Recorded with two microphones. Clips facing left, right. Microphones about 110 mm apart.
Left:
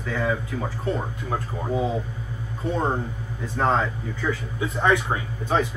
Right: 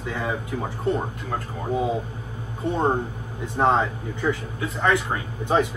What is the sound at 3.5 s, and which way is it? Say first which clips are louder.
Speech: right 2 dB; 20° right (ahead or behind).